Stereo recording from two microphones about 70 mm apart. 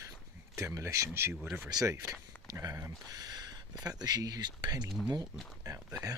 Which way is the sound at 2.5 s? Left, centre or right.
Right.